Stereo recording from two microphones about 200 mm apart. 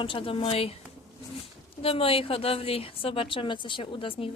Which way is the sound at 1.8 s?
25° left (ahead or behind).